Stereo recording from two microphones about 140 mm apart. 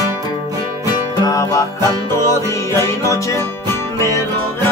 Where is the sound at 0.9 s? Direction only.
25° left (ahead or behind).